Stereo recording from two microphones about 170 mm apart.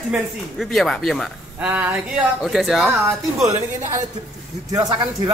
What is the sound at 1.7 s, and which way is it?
Speech, 10° right (ahead or behind).